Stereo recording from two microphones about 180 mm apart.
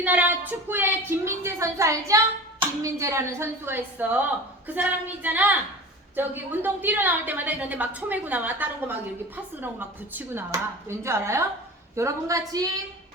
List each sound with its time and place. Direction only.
0.0 s a woman's voice: 10° right (ahead or behind)
10.2 s a woman's voice: 15° right (ahead or behind)